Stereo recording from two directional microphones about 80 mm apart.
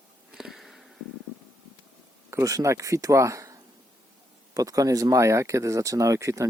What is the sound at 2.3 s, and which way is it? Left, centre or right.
Speech, right.